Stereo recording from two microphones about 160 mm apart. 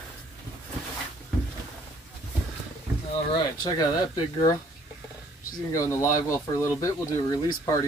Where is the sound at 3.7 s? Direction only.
25° left (ahead or behind).